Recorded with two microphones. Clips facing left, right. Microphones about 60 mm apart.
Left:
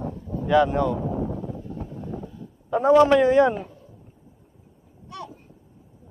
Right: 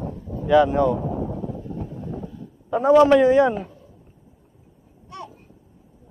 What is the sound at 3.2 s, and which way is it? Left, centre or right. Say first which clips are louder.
Speech: right 1 dB; left.